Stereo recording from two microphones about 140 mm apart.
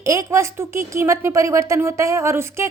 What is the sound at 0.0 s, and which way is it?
A woman's voice, 25° right (ahead or behind).